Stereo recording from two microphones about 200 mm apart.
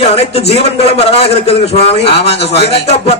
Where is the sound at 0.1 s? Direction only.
30° left (ahead or behind).